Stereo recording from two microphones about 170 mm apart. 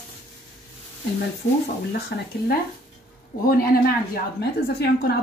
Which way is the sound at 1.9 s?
70° left (ahead or behind).